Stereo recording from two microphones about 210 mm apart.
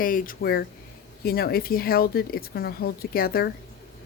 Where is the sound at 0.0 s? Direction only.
40° left (ahead or behind).